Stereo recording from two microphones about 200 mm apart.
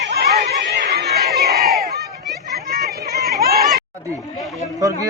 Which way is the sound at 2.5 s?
50° right (ahead or behind).